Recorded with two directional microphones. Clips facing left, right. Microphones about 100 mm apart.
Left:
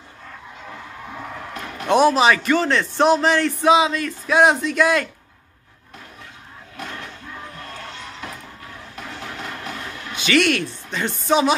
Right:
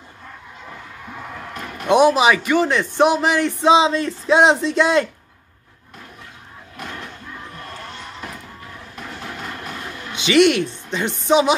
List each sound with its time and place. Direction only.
1.9 s a man's voice: 15° right (ahead or behind)
10.1 s speech: 20° right (ahead or behind)